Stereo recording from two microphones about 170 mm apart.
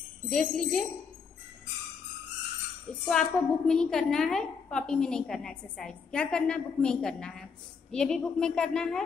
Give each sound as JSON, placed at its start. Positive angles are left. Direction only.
{"t": 0.3, "sound": "a woman's voice", "side_deg": 5}
{"t": 3.1, "sound": "a woman's voice", "side_deg": 5}